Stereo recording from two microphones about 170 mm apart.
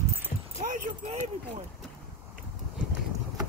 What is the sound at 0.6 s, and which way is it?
Speech, 50° right (ahead or behind).